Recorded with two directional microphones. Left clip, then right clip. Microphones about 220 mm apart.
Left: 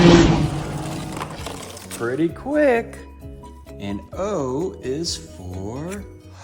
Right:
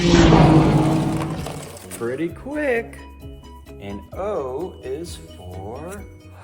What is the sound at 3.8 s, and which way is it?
Music, 45° left (ahead or behind).